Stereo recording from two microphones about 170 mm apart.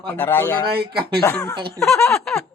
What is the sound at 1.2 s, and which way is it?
Speech, 15° left (ahead or behind).